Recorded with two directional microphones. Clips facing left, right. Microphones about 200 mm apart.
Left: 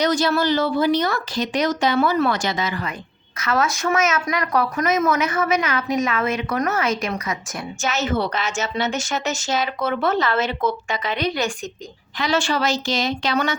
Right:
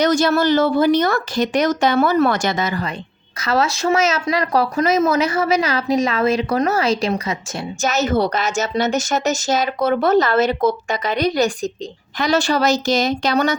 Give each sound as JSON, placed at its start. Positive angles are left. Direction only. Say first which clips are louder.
{"t": 0.0, "sound": "speech", "louder": "right 4 dB", "side_deg": -45}
{"t": 7.8, "sound": "speech", "louder": "right 5 dB", "side_deg": -40}